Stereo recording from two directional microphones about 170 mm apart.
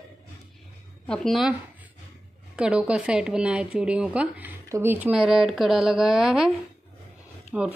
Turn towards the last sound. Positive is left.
turn(degrees=-5)  # may be behind; listen again after turning